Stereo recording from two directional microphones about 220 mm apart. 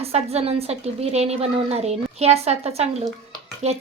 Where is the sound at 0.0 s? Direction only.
25° right (ahead or behind).